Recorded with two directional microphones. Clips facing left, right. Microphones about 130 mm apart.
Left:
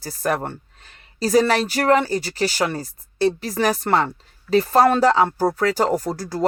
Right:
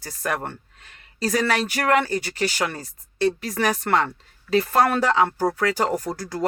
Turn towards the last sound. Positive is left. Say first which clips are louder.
# left 3 dB
turn(degrees=35)  # may be behind; listen again after turning